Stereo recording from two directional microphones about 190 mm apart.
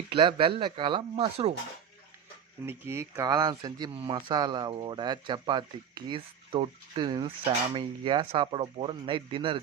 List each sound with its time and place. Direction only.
0.1 s speech: 30° right (ahead or behind)
2.6 s speech: 15° right (ahead or behind)